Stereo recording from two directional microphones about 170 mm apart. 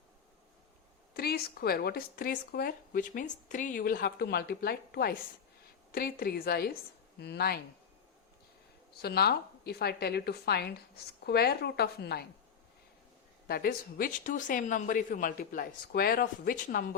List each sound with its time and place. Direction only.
1.1 s a woman's voice: 65° left (ahead or behind)
9.0 s a woman's voice: 70° left (ahead or behind)
13.5 s speech: 65° left (ahead or behind)